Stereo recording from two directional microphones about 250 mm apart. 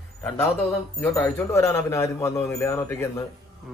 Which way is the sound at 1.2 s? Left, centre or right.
Centre.